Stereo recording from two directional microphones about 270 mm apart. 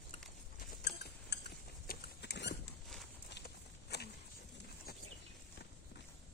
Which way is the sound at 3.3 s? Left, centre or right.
Left.